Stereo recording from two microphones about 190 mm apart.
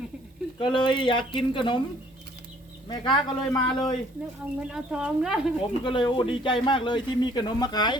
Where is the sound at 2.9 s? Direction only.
20° left (ahead or behind).